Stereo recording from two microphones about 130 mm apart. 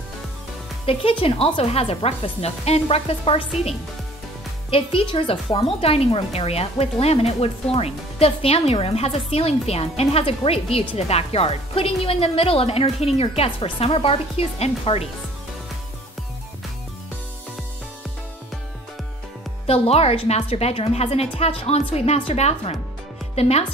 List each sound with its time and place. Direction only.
0.8 s speech: 45° left (ahead or behind)
19.6 s speech: 50° left (ahead or behind)